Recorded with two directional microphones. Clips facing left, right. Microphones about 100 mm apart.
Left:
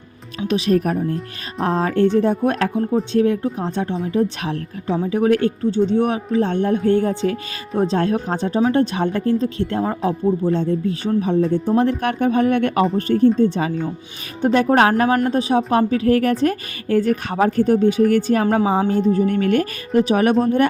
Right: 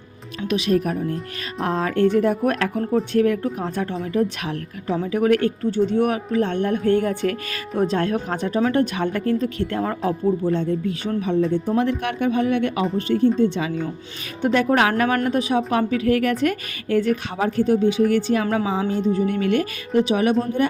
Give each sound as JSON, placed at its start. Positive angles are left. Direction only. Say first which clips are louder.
{"t": 0.4, "sound": "speech", "louder": "left 3 dB", "side_deg": 35}
{"t": 3.1, "sound": "music", "louder": "left 2 dB", "side_deg": 25}
{"t": 7.8, "sound": "a woman's voice", "louder": "left 2 dB", "side_deg": 30}